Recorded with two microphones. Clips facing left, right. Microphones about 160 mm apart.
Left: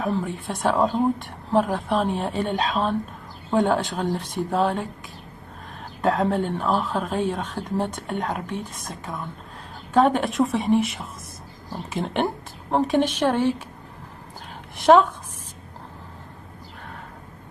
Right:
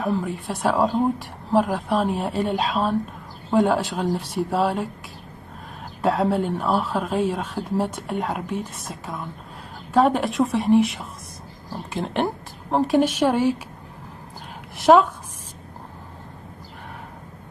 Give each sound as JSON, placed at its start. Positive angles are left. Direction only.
{"t": 0.0, "sound": "speech", "side_deg": 0}
{"t": 6.0, "sound": "a woman's voice", "side_deg": -5}
{"t": 14.8, "sound": "speech", "side_deg": 0}